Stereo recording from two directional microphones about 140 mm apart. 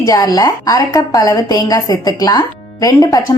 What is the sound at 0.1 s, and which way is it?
Speech, 30° left (ahead or behind).